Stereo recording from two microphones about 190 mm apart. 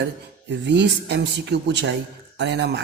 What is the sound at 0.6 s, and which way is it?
Speech, 65° right (ahead or behind).